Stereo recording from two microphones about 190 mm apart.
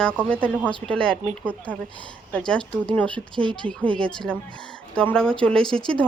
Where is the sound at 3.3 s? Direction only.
25° right (ahead or behind).